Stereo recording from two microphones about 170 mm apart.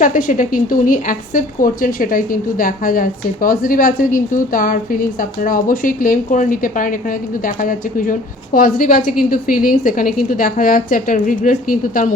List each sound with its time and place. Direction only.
0.0 s a woman's voice: 50° left (ahead or behind)